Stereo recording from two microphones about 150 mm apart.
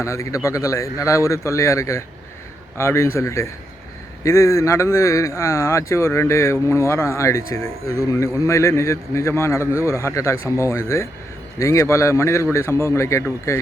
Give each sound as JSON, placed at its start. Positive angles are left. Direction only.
{"t": 0.0, "sound": "a man's voice", "side_deg": 20}